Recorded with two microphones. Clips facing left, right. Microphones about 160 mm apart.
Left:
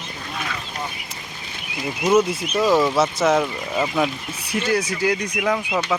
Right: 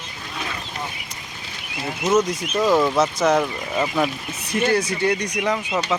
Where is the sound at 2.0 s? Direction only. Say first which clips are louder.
Left 2 dB; 10° left (ahead or behind).